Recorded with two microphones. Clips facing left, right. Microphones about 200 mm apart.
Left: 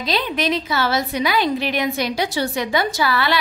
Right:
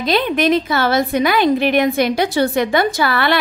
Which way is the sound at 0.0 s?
55° right (ahead or behind).